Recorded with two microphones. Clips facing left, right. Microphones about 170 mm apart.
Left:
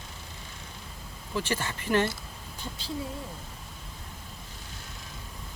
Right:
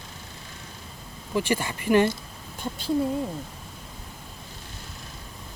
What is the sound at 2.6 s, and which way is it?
Speech, 55° right (ahead or behind).